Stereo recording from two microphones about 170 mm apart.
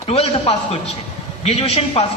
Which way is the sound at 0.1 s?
35° left (ahead or behind).